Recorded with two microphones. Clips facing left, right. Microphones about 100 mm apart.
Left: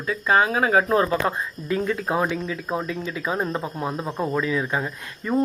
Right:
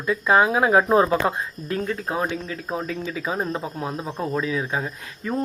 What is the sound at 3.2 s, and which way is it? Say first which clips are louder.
Speech: left 1 dB; centre (ahead or behind).